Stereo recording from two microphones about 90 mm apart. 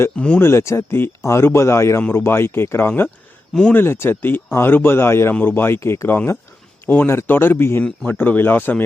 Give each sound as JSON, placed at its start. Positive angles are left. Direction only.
{"t": 0.3, "sound": "speech", "side_deg": 30}